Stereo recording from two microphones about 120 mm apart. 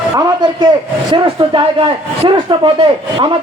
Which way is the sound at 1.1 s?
45° right (ahead or behind).